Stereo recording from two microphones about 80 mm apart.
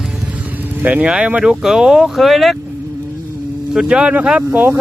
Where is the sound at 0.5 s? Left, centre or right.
Right; by 2.6 s centre.